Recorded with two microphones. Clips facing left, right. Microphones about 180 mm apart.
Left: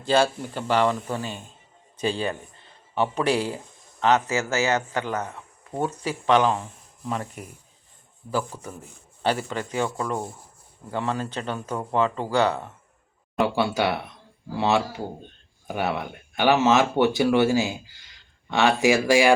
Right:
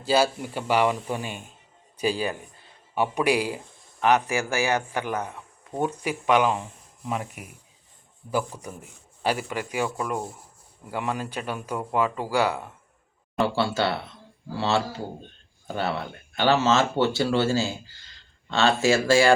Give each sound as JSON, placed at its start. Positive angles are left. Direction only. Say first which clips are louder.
{"t": 0.0, "sound": "speech", "louder": "left 1 dB", "side_deg": -5}
{"t": 13.4, "sound": "speech", "louder": "left 1 dB", "side_deg": 15}